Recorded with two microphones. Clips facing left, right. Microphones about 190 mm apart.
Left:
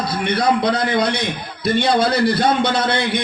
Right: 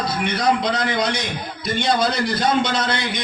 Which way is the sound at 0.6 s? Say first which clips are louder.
Left 4 dB; 60° left (ahead or behind).